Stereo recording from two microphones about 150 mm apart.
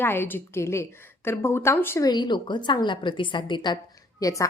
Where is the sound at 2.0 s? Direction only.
30° left (ahead or behind).